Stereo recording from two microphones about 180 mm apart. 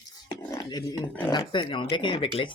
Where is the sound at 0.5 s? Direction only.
20° left (ahead or behind).